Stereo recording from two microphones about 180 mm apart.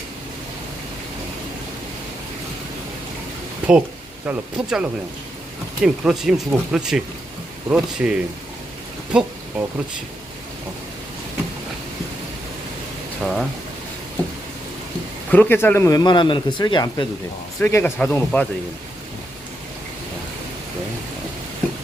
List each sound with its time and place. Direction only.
4.3 s speech: 5° right (ahead or behind)
13.2 s speech: centre (ahead or behind)
15.3 s speech: 10° left (ahead or behind)
17.6 s speech: 15° left (ahead or behind)